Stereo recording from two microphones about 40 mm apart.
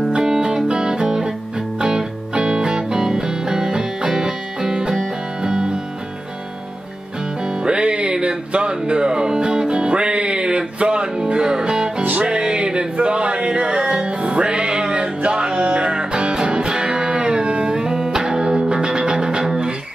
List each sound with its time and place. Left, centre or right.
0.1 s music: right
7.4 s music: right
12.0 s music: right
12.3 s music: right